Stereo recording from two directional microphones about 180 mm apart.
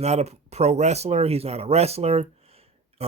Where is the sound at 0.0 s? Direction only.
35° right (ahead or behind).